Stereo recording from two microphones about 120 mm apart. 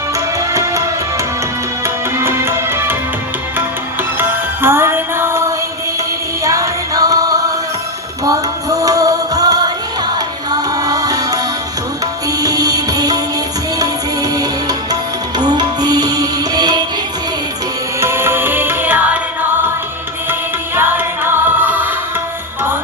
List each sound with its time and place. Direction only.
0.3 s music: 25° right (ahead or behind)
2.1 s music: 20° right (ahead or behind)
4.2 s music: 20° right (ahead or behind)
12.4 s music: 30° right (ahead or behind)
15.4 s music: 35° right (ahead or behind)
18.0 s music: 20° right (ahead or behind)
20.7 s music: 20° right (ahead or behind)